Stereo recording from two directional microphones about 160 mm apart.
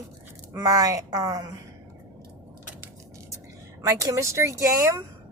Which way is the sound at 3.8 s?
20° right (ahead or behind).